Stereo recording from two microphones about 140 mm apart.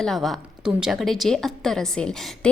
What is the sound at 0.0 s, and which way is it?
A woman's voice, centre (ahead or behind).